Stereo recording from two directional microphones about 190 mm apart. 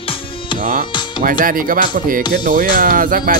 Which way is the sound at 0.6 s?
45° right (ahead or behind).